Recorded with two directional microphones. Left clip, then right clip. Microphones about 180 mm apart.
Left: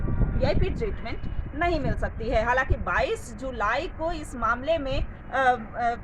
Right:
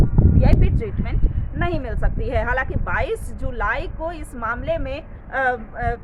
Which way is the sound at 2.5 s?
30° right (ahead or behind).